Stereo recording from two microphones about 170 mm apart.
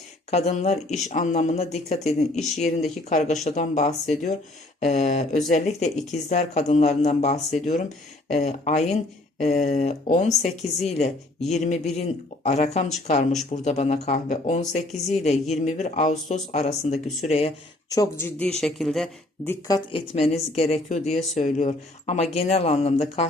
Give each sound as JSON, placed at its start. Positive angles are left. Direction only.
{"t": 0.3, "sound": "speech", "side_deg": 40}
{"t": 17.9, "sound": "speech", "side_deg": 15}
{"t": 19.5, "sound": "speech", "side_deg": 20}